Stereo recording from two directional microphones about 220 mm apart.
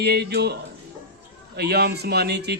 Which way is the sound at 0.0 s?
45° right (ahead or behind).